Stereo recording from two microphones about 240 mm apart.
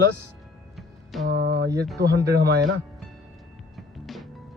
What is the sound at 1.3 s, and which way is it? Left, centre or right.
Speech, right.